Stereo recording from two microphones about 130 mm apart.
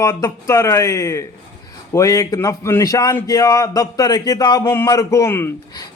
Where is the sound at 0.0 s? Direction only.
20° left (ahead or behind).